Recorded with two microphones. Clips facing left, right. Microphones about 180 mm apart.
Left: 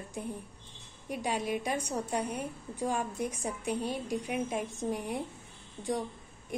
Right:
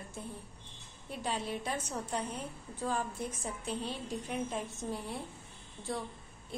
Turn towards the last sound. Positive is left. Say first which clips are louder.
# left 5 dB
turn(degrees=40)  # may be behind; listen again after turning